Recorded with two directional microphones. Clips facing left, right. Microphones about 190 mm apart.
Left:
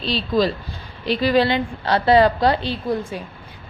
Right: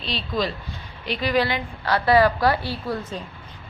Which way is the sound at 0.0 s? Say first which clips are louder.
Left 6 dB; 35° left (ahead or behind).